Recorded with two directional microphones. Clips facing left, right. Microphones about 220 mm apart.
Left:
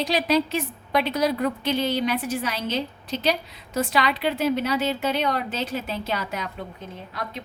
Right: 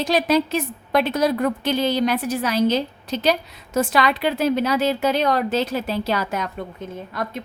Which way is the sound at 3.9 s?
40° right (ahead or behind).